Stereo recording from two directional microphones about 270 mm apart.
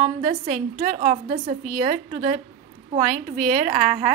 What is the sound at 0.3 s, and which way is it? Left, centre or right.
A woman's voice, right.